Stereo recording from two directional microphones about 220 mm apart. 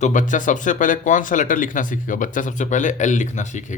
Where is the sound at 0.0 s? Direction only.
35° left (ahead or behind).